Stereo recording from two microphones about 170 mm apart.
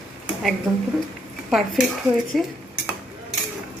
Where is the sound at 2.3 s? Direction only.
Centre (ahead or behind).